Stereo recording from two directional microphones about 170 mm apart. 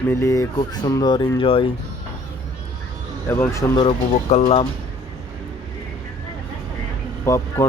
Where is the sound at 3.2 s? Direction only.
15° left (ahead or behind).